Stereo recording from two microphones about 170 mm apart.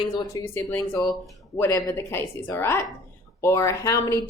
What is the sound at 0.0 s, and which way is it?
Speech, 25° left (ahead or behind).